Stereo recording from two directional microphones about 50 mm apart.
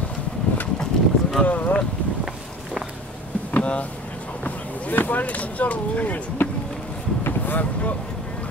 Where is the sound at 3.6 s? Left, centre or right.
Left.